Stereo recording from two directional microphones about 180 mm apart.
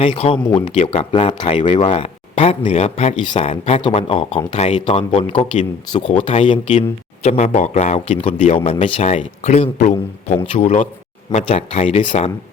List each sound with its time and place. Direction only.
0.0 s speech: 30° left (ahead or behind)